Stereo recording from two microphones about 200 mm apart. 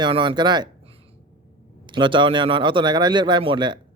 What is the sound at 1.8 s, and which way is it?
A man's voice, 25° right (ahead or behind).